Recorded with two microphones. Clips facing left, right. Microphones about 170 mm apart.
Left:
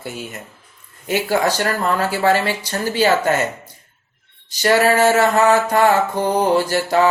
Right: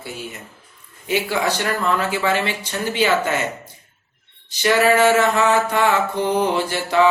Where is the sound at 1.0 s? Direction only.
45° left (ahead or behind).